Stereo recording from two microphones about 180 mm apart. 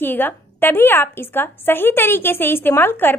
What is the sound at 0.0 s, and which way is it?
A woman's voice, 10° left (ahead or behind).